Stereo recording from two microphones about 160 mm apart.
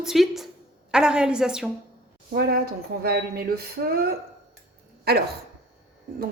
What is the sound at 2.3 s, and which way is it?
Speech, 70° right (ahead or behind).